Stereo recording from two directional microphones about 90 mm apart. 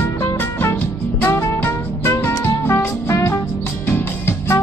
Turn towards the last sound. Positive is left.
turn(degrees=25)  # may be behind; listen again after turning